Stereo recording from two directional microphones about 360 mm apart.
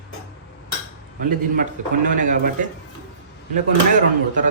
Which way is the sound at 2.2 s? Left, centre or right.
Right.